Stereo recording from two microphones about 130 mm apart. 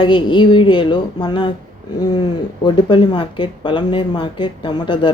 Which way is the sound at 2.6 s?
35° left (ahead or behind).